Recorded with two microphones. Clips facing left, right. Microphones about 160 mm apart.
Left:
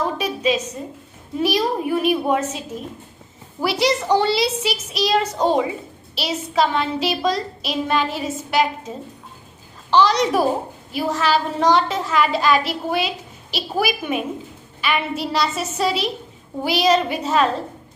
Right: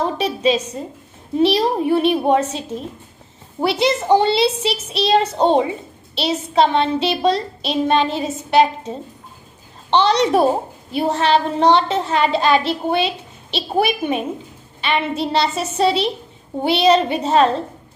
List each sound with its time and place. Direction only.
0.0 s a woman's voice: 30° right (ahead or behind)
9.9 s a woman's voice: 30° right (ahead or behind)